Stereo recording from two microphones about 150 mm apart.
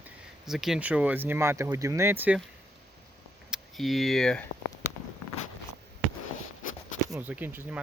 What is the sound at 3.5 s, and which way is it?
Speech, centre (ahead or behind).